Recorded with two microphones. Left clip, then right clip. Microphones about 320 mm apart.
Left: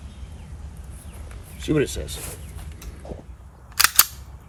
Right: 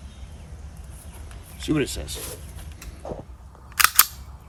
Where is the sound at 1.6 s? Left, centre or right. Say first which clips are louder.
Left 2 dB; centre.